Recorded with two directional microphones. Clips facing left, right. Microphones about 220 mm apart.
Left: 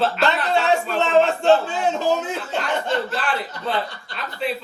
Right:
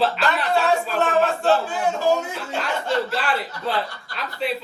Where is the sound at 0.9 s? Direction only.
25° left (ahead or behind).